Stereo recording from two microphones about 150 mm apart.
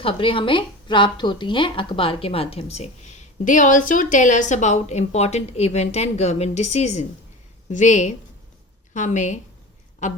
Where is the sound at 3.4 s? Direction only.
55° left (ahead or behind).